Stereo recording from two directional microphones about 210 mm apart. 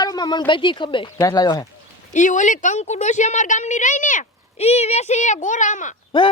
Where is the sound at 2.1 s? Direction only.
35° left (ahead or behind).